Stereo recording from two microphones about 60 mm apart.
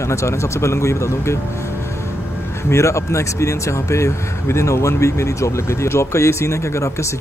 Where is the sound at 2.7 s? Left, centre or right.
Left.